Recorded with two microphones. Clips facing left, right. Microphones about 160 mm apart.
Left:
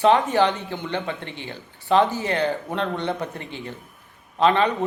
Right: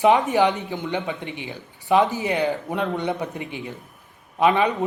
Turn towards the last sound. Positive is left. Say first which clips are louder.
# even
turn(degrees=-10)  # may be behind; listen again after turning